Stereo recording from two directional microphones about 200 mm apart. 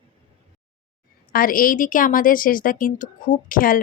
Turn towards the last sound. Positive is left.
turn(degrees=45)  # may be behind; listen again after turning